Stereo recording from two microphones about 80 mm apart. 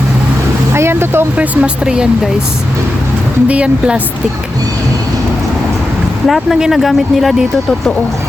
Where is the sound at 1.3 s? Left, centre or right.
Centre.